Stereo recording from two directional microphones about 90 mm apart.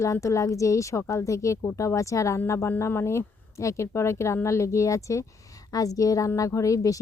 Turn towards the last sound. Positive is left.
turn(degrees=40)  # may be behind; listen again after turning